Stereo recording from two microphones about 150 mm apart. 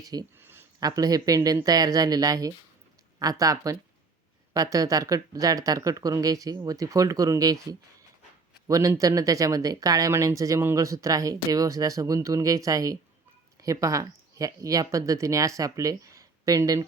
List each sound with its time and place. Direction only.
0.0 s speech: 25° right (ahead or behind)